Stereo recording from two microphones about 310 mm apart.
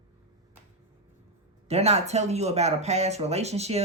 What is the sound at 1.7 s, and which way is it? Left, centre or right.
Speech, centre.